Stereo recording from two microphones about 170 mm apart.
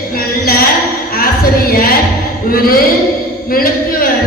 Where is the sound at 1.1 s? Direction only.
60° left (ahead or behind).